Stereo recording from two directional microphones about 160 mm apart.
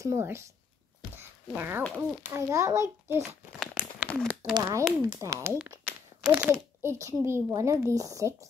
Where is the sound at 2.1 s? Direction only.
15° right (ahead or behind).